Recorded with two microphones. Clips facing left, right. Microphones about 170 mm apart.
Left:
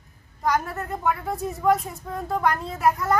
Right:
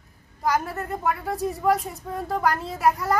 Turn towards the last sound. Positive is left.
turn(degrees=0)  # may be behind; listen again after turning